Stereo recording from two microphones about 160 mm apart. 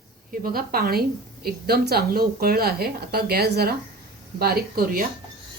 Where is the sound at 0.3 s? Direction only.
65° right (ahead or behind).